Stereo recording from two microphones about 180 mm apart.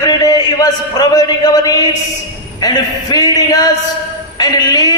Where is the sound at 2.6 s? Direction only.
20° left (ahead or behind).